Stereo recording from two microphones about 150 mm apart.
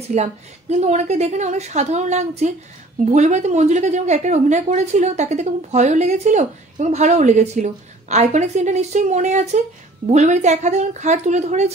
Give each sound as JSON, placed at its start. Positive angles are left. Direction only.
{"t": 0.1, "sound": "a woman's voice", "side_deg": -45}